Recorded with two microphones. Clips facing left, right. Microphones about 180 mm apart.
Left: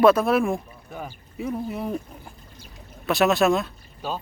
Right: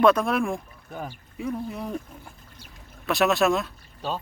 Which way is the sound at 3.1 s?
Centre (ahead or behind).